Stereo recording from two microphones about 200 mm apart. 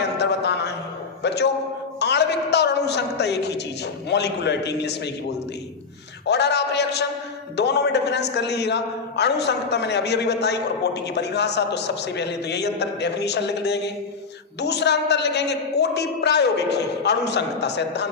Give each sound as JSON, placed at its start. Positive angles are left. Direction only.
{"t": 0.2, "sound": "a sound", "side_deg": 55}
{"t": 4.1, "sound": "a man's voice", "side_deg": 55}
{"t": 6.2, "sound": "a man's voice", "side_deg": 55}